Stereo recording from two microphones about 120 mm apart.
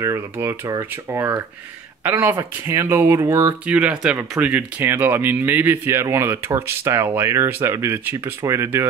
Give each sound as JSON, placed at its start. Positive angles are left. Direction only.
{"t": 0.0, "sound": "speech", "side_deg": -25}
{"t": 3.6, "sound": "speech", "side_deg": -10}